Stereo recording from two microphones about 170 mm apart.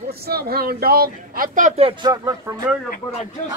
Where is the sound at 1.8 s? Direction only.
35° right (ahead or behind).